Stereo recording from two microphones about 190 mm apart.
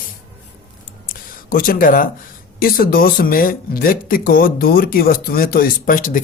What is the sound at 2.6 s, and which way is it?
Speech, 50° left (ahead or behind).